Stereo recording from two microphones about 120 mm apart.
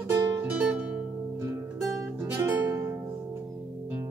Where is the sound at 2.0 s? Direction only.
20° right (ahead or behind).